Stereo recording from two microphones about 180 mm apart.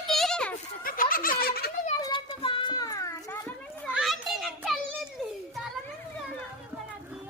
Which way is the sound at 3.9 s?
Centre (ahead or behind).